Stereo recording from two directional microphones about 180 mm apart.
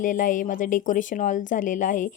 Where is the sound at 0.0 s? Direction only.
45° left (ahead or behind).